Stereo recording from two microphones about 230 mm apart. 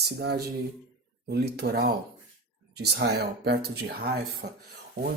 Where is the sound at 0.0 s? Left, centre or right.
Right.